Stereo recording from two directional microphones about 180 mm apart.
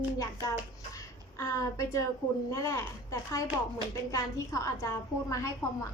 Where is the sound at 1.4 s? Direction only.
15° left (ahead or behind).